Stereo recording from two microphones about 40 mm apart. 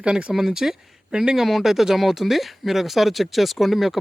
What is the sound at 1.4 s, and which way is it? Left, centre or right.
Speech, centre.